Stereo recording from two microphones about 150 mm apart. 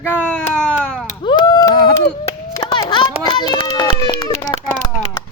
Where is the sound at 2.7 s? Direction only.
30° left (ahead or behind).